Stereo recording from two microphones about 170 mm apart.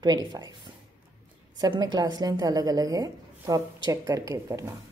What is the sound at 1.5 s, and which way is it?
A woman's voice, 25° right (ahead or behind).